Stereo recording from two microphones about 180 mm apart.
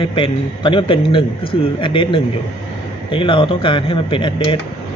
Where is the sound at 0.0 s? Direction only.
30° left (ahead or behind).